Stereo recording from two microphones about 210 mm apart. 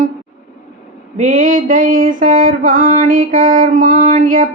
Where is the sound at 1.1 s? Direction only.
40° right (ahead or behind).